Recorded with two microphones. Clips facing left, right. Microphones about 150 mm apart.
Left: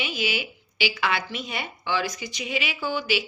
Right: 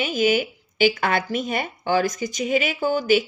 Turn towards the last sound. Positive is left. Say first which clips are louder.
# right 8 dB
turn(degrees=-45)  # may be behind; listen again after turning